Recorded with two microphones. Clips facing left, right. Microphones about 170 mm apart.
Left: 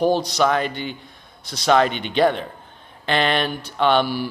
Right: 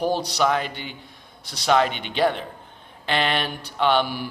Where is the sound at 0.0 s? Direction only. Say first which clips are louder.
Left 4 dB; 10° right (ahead or behind).